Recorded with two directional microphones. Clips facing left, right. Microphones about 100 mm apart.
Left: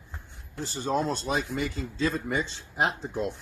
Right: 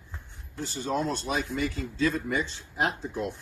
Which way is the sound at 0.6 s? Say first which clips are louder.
Left 1 dB; 30° left (ahead or behind).